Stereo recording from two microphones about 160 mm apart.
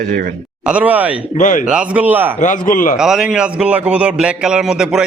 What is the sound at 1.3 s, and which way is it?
Speech, 55° left (ahead or behind).